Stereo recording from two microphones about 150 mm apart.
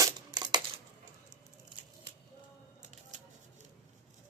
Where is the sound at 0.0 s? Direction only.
25° right (ahead or behind).